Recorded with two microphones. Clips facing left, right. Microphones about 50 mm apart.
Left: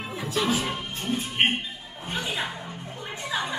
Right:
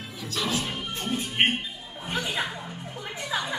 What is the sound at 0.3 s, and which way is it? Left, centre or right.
Speech, centre.